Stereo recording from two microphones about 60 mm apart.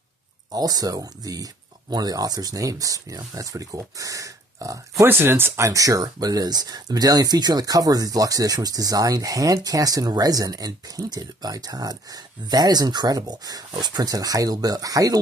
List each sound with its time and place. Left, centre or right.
0.5 s speech: right
5.0 s speech: right
5.6 s speech: right